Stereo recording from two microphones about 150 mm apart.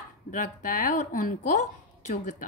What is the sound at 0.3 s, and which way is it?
A woman's voice, 60° left (ahead or behind).